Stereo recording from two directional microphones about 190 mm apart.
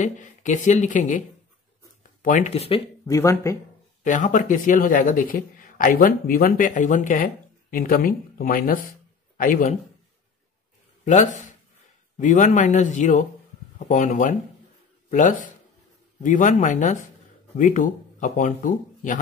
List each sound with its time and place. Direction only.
0.0 s speech: 40° left (ahead or behind)
2.2 s speech: 40° left (ahead or behind)
3.1 s speech: 15° left (ahead or behind)
4.0 s speech: 40° left (ahead or behind)
11.1 s speech: 40° left (ahead or behind)